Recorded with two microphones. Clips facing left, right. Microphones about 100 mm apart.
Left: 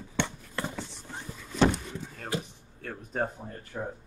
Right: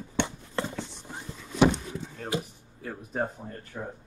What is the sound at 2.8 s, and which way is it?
Speech, 5° right (ahead or behind).